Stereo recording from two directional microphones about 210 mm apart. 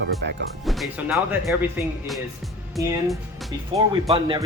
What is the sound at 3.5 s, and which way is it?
Speech, 15° right (ahead or behind).